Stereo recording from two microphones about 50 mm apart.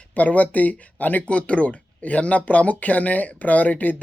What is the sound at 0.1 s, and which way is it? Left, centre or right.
Speech, left.